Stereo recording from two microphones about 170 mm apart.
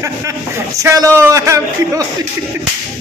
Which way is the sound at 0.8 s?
20° right (ahead or behind).